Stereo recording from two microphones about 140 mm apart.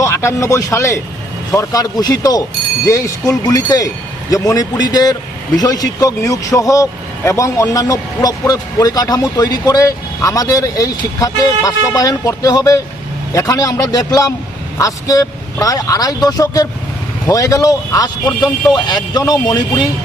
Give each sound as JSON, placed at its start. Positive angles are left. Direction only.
{"t": 0.0, "sound": "a man's voice", "side_deg": 20}